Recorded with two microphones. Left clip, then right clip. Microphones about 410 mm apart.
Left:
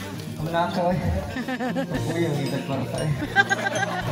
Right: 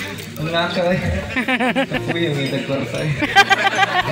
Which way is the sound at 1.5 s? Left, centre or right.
Left.